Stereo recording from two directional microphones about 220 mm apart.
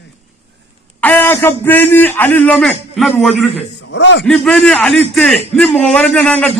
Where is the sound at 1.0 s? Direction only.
10° left (ahead or behind).